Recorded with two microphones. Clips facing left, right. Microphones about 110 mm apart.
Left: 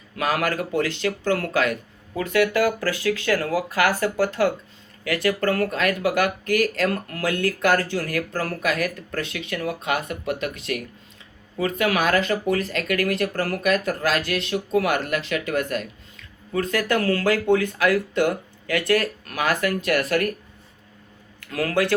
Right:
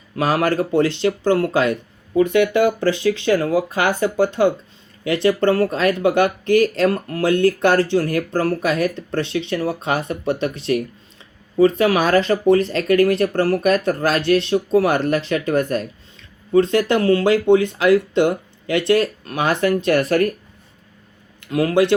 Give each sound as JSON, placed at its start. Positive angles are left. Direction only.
{"t": 0.2, "sound": "speech", "side_deg": -30}
{"t": 21.4, "sound": "speech", "side_deg": -20}